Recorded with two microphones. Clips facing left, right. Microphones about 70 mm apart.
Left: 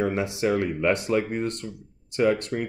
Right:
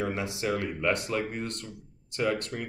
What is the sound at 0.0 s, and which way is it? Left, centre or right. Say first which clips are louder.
Speech: left 6 dB; left.